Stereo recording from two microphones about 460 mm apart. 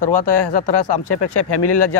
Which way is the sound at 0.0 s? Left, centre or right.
Left.